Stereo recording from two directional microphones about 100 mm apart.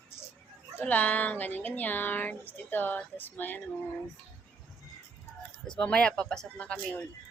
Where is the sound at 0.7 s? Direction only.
15° left (ahead or behind).